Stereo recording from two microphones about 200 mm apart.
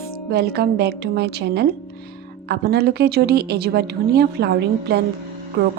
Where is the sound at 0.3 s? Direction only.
55° right (ahead or behind).